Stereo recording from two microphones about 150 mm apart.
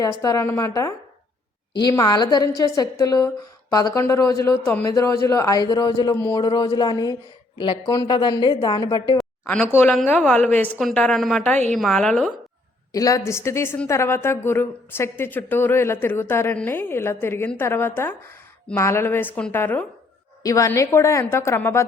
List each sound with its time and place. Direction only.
0.2 s a woman's voice: 20° left (ahead or behind)
10.1 s a woman's voice: 10° left (ahead or behind)
12.9 s a woman's voice: 20° left (ahead or behind)